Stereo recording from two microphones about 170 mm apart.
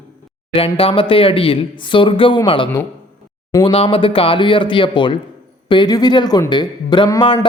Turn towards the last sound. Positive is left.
turn(degrees=25)  # may be behind; listen again after turning